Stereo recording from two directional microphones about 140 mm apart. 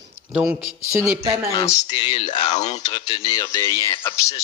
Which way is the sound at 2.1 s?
55° left (ahead or behind).